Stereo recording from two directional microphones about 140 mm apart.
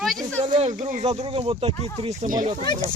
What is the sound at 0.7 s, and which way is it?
Speech, 65° right (ahead or behind).